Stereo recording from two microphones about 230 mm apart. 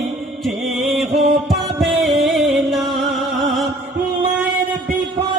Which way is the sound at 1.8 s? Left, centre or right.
Centre.